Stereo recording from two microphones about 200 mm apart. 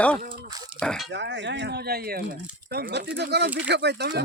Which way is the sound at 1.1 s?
65° right (ahead or behind).